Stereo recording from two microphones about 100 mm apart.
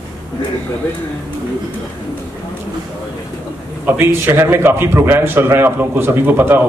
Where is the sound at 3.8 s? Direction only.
25° right (ahead or behind).